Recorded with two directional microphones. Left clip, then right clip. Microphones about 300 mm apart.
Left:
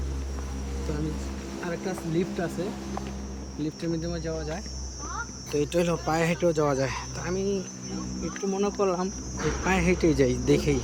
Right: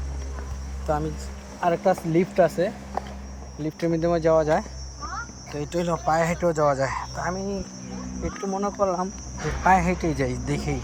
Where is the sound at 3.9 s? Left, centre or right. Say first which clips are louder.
Right 12 dB; centre.